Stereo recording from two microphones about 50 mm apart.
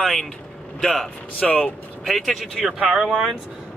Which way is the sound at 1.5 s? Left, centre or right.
Left.